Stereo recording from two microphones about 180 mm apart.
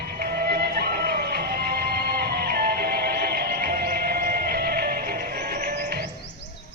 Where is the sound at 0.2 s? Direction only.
60° right (ahead or behind).